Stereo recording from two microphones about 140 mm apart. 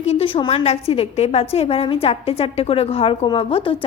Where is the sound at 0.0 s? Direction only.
45° left (ahead or behind).